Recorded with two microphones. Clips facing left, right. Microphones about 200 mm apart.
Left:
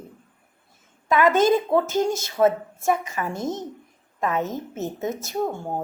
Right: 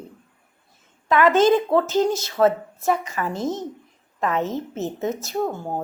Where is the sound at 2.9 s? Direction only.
25° left (ahead or behind).